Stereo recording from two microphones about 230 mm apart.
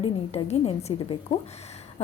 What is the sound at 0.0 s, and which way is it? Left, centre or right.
A woman's voice, left.